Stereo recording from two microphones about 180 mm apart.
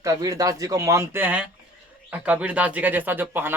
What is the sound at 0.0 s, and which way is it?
Speech, 20° right (ahead or behind).